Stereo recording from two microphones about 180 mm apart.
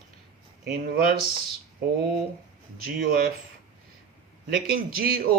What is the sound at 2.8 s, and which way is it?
Speech, 55° right (ahead or behind).